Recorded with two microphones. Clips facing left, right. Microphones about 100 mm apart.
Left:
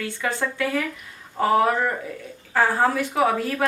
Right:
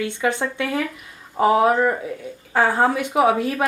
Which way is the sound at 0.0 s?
20° right (ahead or behind).